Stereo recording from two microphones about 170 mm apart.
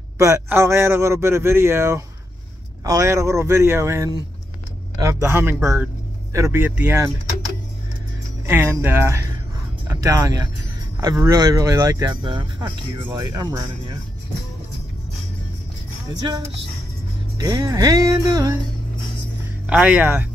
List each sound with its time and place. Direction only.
0.2 s a man's voice: 15° right (ahead or behind)
8.5 s a man's voice: 10° right (ahead or behind)
16.1 s speech: 25° right (ahead or behind)
19.6 s a man's voice: 5° right (ahead or behind)